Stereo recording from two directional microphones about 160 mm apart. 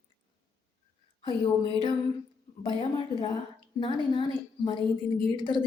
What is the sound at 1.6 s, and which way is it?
Speech, 35° left (ahead or behind).